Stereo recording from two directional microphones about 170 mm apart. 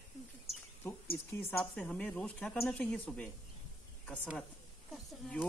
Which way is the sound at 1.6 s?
5° left (ahead or behind).